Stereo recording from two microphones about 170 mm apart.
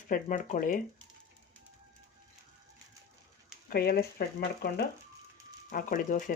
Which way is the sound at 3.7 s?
65° left (ahead or behind).